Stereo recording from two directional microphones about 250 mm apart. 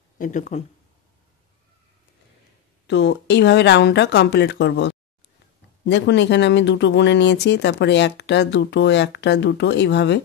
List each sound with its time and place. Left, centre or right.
0.2 s speech: left
2.9 s speech: left